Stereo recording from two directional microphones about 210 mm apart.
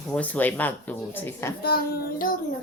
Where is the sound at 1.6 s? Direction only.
45° left (ahead or behind).